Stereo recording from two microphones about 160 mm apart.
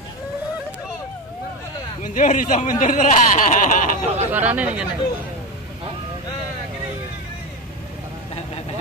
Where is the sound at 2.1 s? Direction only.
50° left (ahead or behind).